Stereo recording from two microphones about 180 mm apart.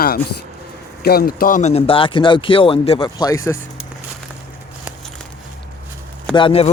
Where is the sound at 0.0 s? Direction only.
55° left (ahead or behind); by 3.1 s 35° left (ahead or behind).